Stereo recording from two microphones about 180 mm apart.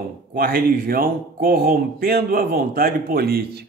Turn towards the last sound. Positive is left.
turn(degrees=-60)  # may be behind; listen again after turning